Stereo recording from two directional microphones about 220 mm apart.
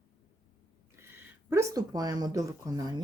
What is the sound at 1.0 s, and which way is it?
Speech, 10° right (ahead or behind).